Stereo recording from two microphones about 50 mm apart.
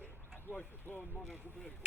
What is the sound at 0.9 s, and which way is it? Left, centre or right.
Boat, right.